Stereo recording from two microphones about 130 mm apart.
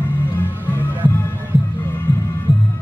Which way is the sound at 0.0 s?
15° left (ahead or behind).